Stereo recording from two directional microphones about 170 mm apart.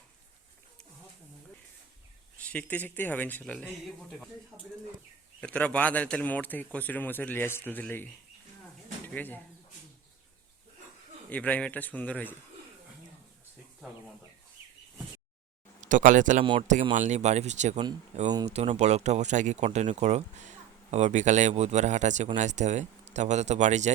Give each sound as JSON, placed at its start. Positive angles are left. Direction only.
{"t": 2.4, "sound": "a man's voice", "side_deg": 10}
{"t": 9.1, "sound": "a man's voice", "side_deg": 10}
{"t": 11.3, "sound": "a man's voice", "side_deg": 10}
{"t": 15.8, "sound": "speech", "side_deg": -50}
{"t": 16.4, "sound": "speech", "side_deg": -30}
{"t": 16.9, "sound": "speech", "side_deg": -45}
{"t": 18.3, "sound": "speech", "side_deg": -25}
{"t": 18.5, "sound": "speech", "side_deg": -35}